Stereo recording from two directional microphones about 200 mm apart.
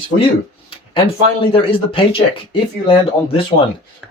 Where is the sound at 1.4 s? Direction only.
25° left (ahead or behind).